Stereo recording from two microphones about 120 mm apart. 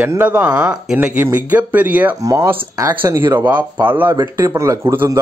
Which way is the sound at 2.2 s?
30° right (ahead or behind).